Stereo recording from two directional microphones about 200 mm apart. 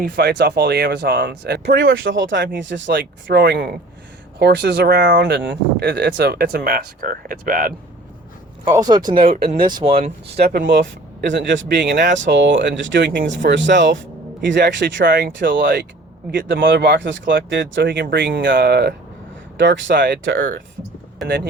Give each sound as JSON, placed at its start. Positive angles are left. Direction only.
{"t": 0.0, "sound": "speech", "side_deg": -55}
{"t": 2.0, "sound": "speech", "side_deg": -70}
{"t": 8.6, "sound": "speech", "side_deg": -20}
{"t": 9.2, "sound": "speech", "side_deg": -45}
{"t": 9.6, "sound": "speech", "side_deg": -25}
{"t": 10.0, "sound": "speech", "side_deg": -50}
{"t": 15.0, "sound": "speech", "side_deg": -50}
{"t": 16.6, "sound": "speech", "side_deg": -60}
{"t": 19.5, "sound": "speech", "side_deg": -65}